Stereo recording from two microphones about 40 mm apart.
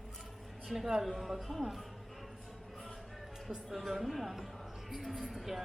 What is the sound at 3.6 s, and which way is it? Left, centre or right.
A woman's voice, centre.